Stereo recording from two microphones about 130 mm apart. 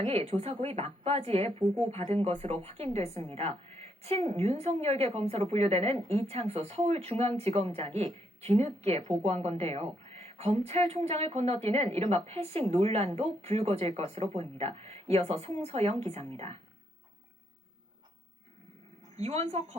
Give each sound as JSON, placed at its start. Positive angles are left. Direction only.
{"t": 0.0, "sound": "a woman's voice", "side_deg": -55}
{"t": 19.1, "sound": "a woman's voice", "side_deg": -55}